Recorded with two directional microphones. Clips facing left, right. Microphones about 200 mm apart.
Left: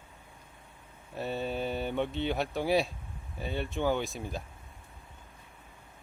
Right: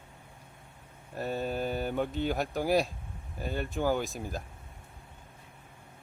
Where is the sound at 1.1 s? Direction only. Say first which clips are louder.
Right 1 dB; centre (ahead or behind).